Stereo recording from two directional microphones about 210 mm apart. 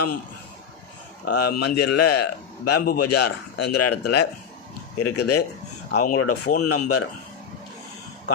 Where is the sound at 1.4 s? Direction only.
50° left (ahead or behind).